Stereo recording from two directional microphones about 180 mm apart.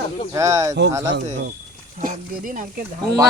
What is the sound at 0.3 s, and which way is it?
Speech, 15° right (ahead or behind).